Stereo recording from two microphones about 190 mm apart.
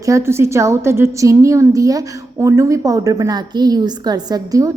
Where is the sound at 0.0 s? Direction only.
15° right (ahead or behind).